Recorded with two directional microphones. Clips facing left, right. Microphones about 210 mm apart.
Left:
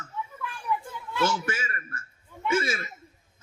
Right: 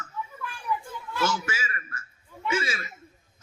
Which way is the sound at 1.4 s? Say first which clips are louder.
Left 2 dB; 55° left (ahead or behind).